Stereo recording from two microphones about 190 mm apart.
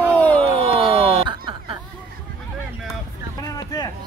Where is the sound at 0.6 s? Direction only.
25° right (ahead or behind).